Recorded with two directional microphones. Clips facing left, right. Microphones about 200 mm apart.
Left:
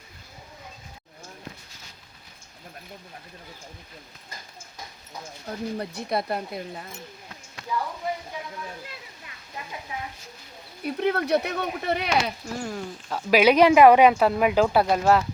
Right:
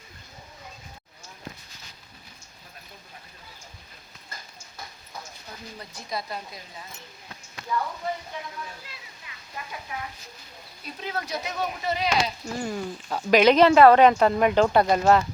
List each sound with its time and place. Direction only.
5.5 s speech: 55° left (ahead or behind)
9.6 s frying: 20° left (ahead or behind)
10.8 s speech: 60° left (ahead or behind)
12.5 s speech: centre (ahead or behind)